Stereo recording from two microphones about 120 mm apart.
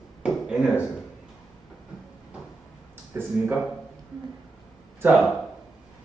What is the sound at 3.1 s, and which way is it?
Speech, 20° right (ahead or behind).